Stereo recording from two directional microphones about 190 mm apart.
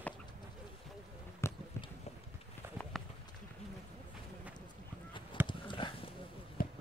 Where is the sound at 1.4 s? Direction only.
15° left (ahead or behind).